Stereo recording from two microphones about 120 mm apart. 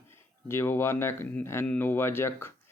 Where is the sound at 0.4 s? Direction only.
20° left (ahead or behind).